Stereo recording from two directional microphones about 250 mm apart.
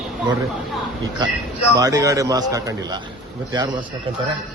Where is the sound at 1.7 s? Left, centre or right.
Centre.